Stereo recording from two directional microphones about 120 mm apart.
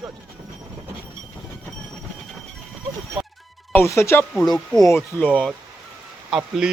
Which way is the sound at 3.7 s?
20° left (ahead or behind).